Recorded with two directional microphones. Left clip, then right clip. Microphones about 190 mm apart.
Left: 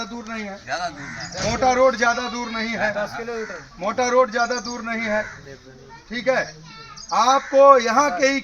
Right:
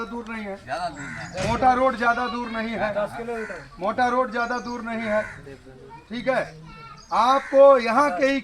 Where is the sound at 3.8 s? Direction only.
25° left (ahead or behind).